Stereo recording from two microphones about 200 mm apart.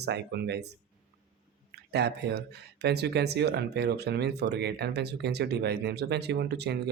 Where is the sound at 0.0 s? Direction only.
55° right (ahead or behind).